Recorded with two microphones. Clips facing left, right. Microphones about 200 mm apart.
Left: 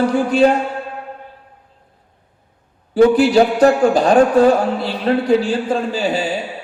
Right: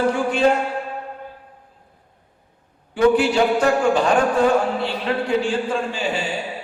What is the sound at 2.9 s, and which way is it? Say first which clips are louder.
A man's voice: left 5 dB; 35° left (ahead or behind).